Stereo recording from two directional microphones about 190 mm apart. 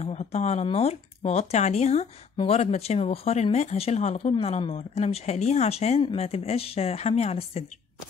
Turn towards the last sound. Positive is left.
turn(degrees=35)  # may be behind; listen again after turning